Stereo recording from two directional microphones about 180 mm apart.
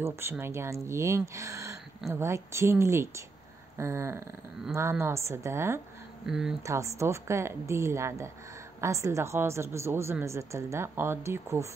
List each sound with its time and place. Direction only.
0.0 s a woman's voice: 15° right (ahead or behind)
6.2 s speech: 5° right (ahead or behind)
6.6 s a woman's voice: 15° right (ahead or behind)